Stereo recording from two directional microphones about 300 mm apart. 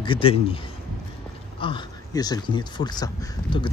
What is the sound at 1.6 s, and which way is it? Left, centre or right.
Speech, centre.